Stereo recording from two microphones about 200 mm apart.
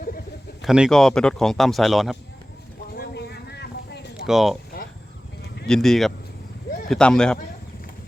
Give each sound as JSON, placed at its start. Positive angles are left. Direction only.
{"t": 0.6, "sound": "speech", "side_deg": 0}
{"t": 2.9, "sound": "a sound", "side_deg": 55}
{"t": 4.3, "sound": "speech", "side_deg": 0}
{"t": 5.6, "sound": "speech", "side_deg": 0}
{"t": 6.7, "sound": "a sound", "side_deg": 45}
{"t": 6.9, "sound": "speech", "side_deg": 5}